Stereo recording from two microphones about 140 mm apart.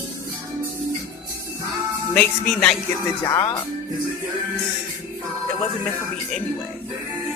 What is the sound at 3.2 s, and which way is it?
Speech, 30° left (ahead or behind).